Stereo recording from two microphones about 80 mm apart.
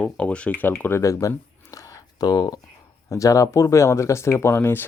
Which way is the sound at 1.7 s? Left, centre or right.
Left.